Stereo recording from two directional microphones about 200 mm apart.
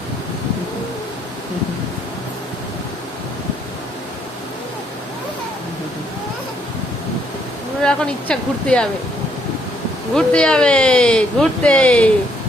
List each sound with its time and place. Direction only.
7.8 s speech: 5° left (ahead or behind)
10.2 s speech: 5° left (ahead or behind)